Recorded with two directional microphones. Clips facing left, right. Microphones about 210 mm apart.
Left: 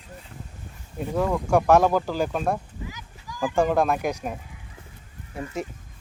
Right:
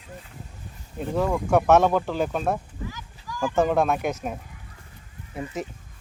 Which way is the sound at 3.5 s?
Centre (ahead or behind).